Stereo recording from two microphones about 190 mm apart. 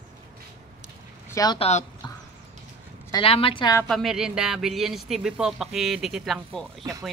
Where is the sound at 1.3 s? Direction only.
20° left (ahead or behind).